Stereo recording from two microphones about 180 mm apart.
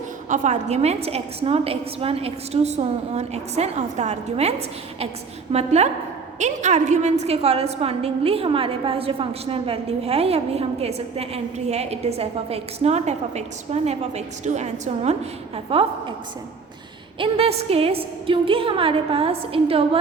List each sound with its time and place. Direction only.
0.3 s a woman's voice: 40° right (ahead or behind)
17.2 s a woman's voice: 30° right (ahead or behind)